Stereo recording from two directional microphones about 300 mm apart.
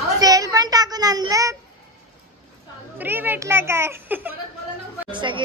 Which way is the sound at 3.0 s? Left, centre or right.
Centre.